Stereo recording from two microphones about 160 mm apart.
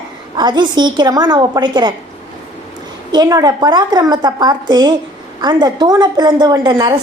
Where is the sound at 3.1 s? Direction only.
25° right (ahead or behind).